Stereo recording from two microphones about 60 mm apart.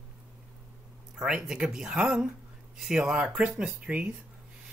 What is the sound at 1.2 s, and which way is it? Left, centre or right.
Speech, centre.